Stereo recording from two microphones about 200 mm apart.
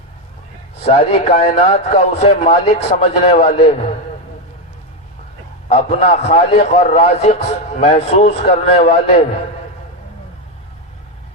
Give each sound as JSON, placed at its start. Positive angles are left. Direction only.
{"t": 0.9, "sound": "a man's voice", "side_deg": 30}
{"t": 5.6, "sound": "a man's voice", "side_deg": 30}